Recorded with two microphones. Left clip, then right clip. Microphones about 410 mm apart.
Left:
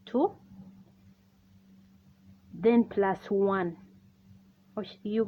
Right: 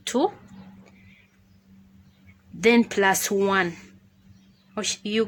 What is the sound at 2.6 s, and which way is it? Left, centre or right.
Speech, left.